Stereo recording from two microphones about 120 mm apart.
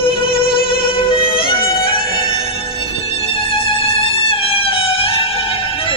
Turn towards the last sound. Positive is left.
turn(degrees=50)  # may be behind; listen again after turning